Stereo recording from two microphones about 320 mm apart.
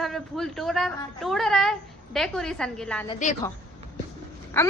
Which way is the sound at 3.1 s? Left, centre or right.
Left.